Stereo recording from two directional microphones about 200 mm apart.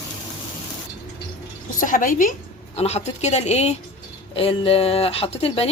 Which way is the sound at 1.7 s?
40° left (ahead or behind).